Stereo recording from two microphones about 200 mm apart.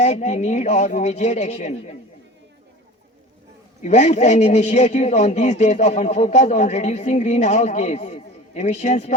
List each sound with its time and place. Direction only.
0.0 s a man's voice: 35° left (ahead or behind)
3.8 s a man's voice: 35° left (ahead or behind)